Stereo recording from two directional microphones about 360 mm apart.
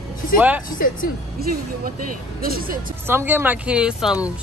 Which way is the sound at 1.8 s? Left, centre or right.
Right.